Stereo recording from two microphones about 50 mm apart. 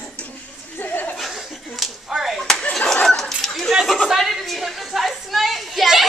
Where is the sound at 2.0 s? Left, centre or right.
Centre.